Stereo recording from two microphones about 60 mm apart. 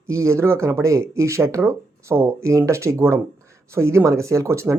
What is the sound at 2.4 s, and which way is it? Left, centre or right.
Speech, right.